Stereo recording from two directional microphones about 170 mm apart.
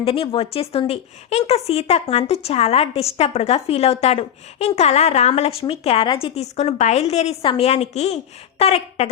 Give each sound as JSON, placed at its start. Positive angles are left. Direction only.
{"t": 0.0, "sound": "speech", "side_deg": 35}